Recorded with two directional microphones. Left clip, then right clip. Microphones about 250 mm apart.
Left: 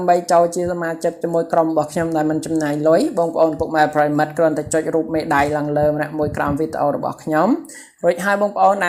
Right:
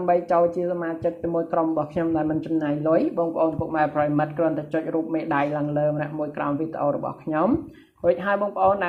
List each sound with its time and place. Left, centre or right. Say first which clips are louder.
0.0 s speech: left 6 dB; left